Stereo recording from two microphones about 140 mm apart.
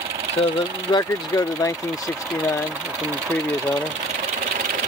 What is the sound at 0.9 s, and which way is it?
Speech, 25° left (ahead or behind).